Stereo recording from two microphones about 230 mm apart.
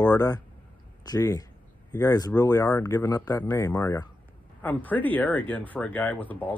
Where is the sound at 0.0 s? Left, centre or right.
Centre.